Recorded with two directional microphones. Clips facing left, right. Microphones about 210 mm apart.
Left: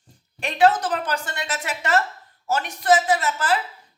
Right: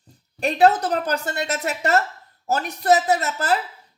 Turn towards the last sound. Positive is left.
turn(degrees=-40)  # may be behind; listen again after turning